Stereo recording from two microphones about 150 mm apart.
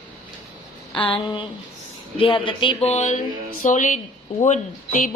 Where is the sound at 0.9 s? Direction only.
35° left (ahead or behind).